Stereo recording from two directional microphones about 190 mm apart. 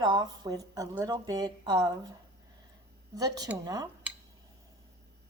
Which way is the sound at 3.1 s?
20° right (ahead or behind).